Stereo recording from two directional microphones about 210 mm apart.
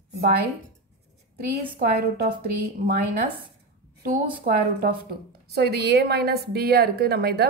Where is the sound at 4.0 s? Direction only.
45° right (ahead or behind).